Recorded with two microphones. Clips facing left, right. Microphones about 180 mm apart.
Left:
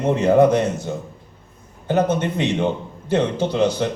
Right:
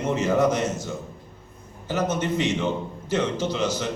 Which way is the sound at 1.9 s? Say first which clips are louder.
Left 5 dB; 60° left (ahead or behind).